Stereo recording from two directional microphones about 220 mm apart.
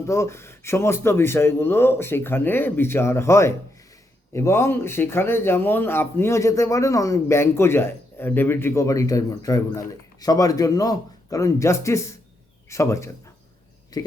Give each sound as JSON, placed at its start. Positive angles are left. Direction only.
{"t": 0.0, "sound": "a man's voice", "side_deg": 10}